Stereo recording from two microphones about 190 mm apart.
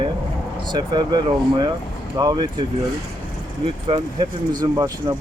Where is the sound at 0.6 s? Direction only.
25° right (ahead or behind).